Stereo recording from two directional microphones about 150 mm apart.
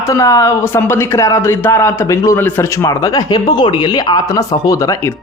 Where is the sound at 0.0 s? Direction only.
20° left (ahead or behind).